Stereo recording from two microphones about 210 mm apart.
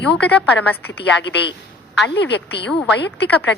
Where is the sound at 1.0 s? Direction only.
50° left (ahead or behind).